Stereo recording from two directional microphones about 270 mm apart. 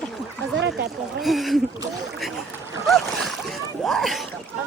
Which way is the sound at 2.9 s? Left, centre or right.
Centre.